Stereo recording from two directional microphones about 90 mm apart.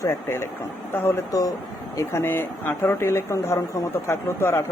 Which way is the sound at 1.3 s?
40° left (ahead or behind).